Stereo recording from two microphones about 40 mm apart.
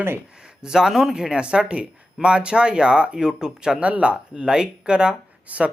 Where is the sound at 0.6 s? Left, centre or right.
Centre.